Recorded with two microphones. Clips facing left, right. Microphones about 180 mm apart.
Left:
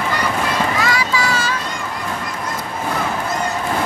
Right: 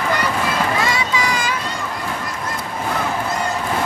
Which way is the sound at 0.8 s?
20° right (ahead or behind).